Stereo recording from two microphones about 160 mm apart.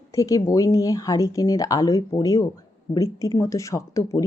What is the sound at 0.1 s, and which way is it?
Speech, 20° left (ahead or behind).